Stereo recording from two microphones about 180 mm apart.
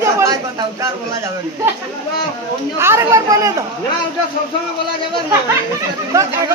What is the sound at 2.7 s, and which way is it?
Speech, 15° right (ahead or behind).